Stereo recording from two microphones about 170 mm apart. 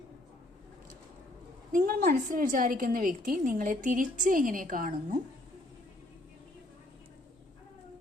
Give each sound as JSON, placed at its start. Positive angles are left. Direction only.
{"t": 1.7, "sound": "a woman's voice", "side_deg": -60}